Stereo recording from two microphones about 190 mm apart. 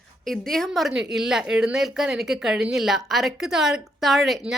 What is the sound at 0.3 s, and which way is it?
A woman's voice, centre (ahead or behind).